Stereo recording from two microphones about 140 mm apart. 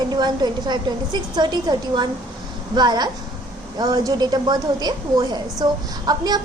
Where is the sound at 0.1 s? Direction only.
30° right (ahead or behind).